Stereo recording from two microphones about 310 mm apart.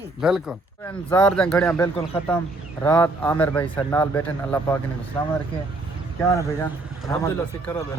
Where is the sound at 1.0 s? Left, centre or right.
Centre.